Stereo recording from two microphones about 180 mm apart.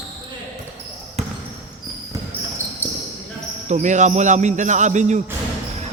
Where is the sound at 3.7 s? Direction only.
40° right (ahead or behind).